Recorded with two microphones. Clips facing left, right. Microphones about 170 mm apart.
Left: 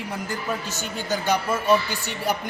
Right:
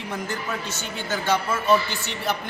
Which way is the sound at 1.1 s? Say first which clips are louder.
Even; 15° left (ahead or behind).